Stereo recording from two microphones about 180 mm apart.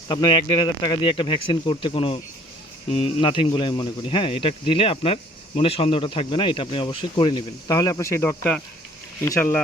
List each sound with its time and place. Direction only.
0.1 s a man's voice: 25° left (ahead or behind)